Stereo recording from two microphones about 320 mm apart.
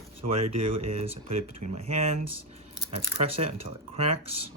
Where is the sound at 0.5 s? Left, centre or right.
Centre.